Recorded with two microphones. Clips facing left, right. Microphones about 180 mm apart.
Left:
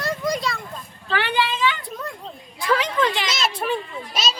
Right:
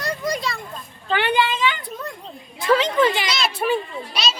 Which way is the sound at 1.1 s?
20° right (ahead or behind).